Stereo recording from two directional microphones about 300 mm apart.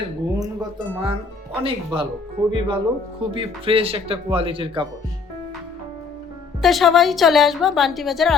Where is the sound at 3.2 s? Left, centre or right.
Centre.